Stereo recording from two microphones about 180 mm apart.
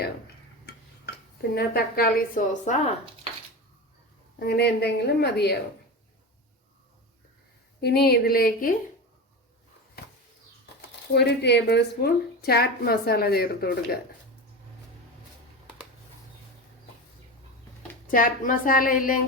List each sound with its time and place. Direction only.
1.5 s a woman's voice: 55° left (ahead or behind)
4.4 s speech: 65° left (ahead or behind)
7.8 s speech: 65° left (ahead or behind)
10.8 s speech: 65° left (ahead or behind)
18.1 s a woman's voice: 50° left (ahead or behind)